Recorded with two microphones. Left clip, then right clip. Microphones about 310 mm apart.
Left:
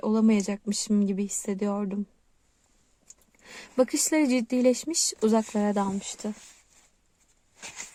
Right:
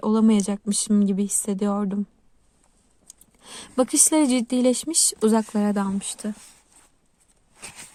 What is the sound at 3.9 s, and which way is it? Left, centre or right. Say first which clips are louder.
Speech: right 4 dB; right.